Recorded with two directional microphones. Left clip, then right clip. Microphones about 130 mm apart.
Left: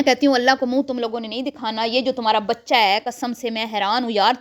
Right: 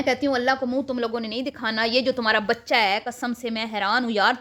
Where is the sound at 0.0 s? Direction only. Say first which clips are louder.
Left 6 dB; 70° left (ahead or behind).